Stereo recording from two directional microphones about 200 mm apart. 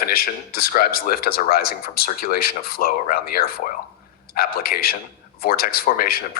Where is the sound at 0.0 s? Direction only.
50° left (ahead or behind).